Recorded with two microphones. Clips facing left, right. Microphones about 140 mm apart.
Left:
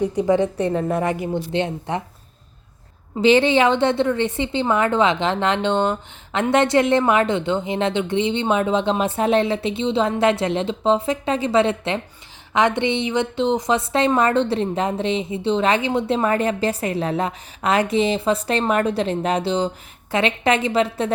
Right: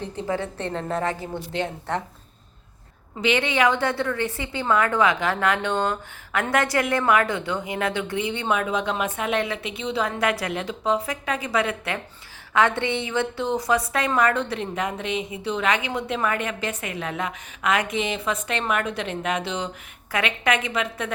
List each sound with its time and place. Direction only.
0.0 s a woman's voice: 15° left (ahead or behind)
3.2 s a woman's voice: 30° left (ahead or behind)